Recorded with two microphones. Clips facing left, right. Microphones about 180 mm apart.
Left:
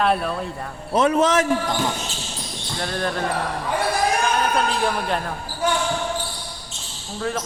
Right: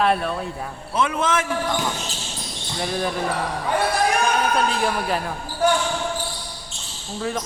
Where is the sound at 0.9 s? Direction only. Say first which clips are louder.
Left 5 dB; 40° left (ahead or behind).